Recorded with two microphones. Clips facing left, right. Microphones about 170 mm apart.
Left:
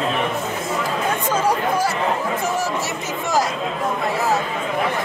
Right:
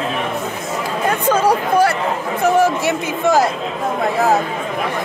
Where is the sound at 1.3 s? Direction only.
65° right (ahead or behind).